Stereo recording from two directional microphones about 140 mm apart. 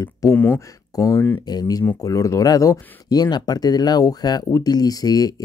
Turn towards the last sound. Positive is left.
turn(degrees=25)  # may be behind; listen again after turning